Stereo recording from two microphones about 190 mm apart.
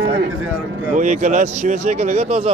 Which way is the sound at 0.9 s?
40° right (ahead or behind).